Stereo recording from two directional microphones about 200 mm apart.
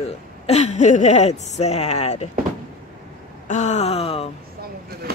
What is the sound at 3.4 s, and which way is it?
Speech, 35° left (ahead or behind).